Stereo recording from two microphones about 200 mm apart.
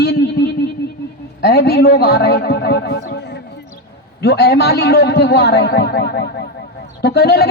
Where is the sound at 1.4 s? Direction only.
50° left (ahead or behind).